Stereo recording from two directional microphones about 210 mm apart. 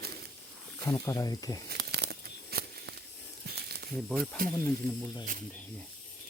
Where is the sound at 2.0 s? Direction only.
50° right (ahead or behind).